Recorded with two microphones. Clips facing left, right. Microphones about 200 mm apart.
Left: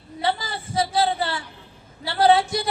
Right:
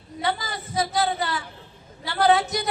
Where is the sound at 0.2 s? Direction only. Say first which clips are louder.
Left 2 dB; 30° left (ahead or behind).